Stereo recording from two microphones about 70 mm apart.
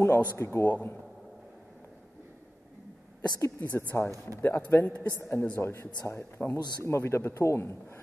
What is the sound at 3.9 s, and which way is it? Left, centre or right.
Speech, left.